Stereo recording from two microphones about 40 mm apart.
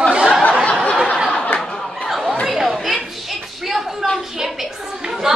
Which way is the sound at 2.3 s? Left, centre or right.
Centre.